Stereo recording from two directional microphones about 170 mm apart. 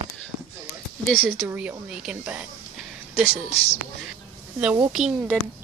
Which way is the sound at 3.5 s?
35° left (ahead or behind).